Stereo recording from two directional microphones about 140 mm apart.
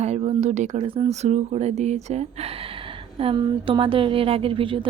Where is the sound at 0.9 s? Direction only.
45° right (ahead or behind).